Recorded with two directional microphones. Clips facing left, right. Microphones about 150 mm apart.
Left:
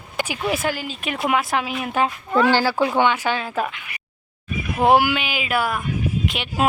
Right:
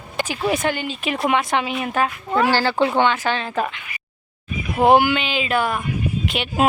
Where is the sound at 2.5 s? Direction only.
15° left (ahead or behind); by 6.6 s centre (ahead or behind).